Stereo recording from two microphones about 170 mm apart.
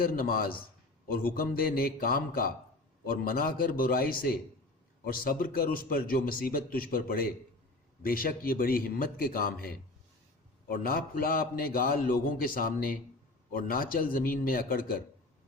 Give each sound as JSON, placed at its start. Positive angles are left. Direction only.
{"t": 0.0, "sound": "a man's voice", "side_deg": 60}